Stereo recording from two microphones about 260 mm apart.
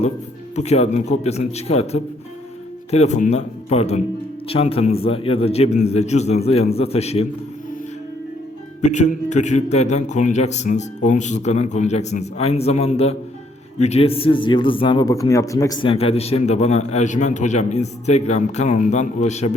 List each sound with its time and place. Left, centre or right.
0.5 s speech: left
8.8 s speech: left